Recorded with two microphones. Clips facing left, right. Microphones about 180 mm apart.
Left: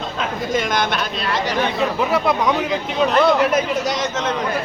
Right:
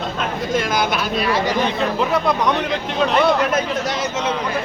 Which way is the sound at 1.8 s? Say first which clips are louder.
Even; 5° left (ahead or behind).